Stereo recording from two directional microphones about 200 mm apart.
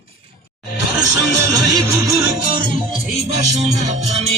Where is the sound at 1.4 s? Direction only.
15° right (ahead or behind).